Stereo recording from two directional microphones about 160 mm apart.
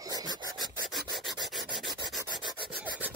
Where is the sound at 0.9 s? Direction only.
Centre (ahead or behind).